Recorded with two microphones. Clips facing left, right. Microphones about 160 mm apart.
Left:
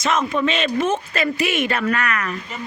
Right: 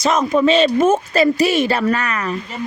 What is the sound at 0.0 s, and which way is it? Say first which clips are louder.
Speech: right 5 dB; 40° right (ahead or behind).